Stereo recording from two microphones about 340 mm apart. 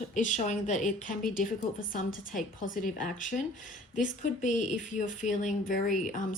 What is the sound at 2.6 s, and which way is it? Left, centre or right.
A woman's voice, left.